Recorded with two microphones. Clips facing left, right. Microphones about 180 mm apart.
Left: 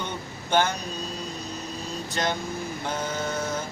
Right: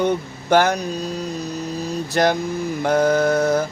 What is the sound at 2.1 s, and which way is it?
Mantra, 70° right (ahead or behind).